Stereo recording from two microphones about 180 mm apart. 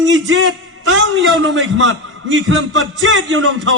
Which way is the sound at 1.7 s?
90° right.